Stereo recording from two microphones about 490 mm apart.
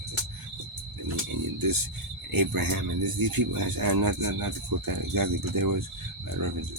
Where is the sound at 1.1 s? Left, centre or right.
Right.